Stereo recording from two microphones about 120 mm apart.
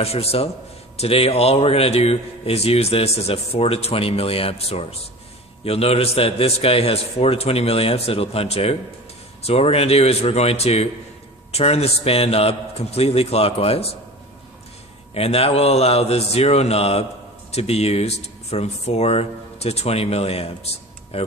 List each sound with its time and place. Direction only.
0.0 s speech: 55° left (ahead or behind)
15.1 s speech: 55° left (ahead or behind)